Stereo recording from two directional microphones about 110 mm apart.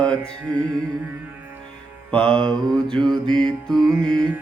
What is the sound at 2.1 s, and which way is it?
Mantra, 10° left (ahead or behind).